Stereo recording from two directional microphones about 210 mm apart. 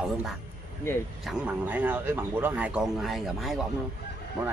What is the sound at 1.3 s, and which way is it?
Speech, 5° right (ahead or behind).